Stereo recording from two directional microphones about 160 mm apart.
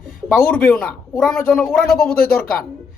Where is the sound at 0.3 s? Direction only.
5° left (ahead or behind).